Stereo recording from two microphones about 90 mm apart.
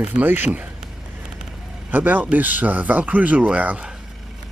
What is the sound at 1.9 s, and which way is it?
Speech, 20° right (ahead or behind).